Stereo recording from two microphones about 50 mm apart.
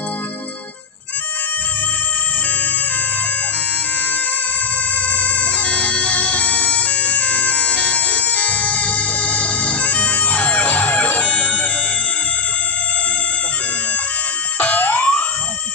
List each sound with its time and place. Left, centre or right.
5.0 s music: left
14.6 s music: left